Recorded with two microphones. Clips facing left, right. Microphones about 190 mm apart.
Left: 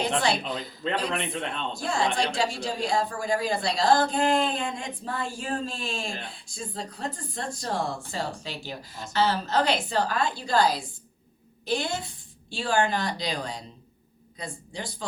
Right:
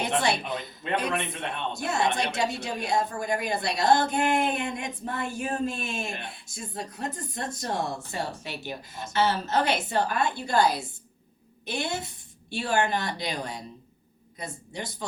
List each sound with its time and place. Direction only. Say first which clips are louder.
0.2 s a woman's voice: left 1 dB; 20° right (ahead or behind)
11.7 s a woman's voice: left 3 dB; 25° right (ahead or behind)